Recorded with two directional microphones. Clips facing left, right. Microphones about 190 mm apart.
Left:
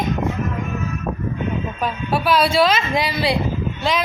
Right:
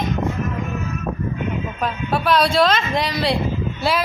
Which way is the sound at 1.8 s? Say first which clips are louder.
Right 1 dB; centre (ahead or behind).